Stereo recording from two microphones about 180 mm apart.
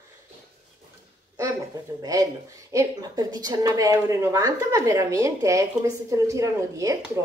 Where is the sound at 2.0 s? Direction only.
20° right (ahead or behind).